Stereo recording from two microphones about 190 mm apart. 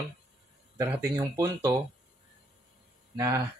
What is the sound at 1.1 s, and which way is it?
Speech, 15° right (ahead or behind).